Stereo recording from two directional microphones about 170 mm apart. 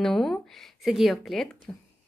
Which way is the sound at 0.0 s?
Centre (ahead or behind).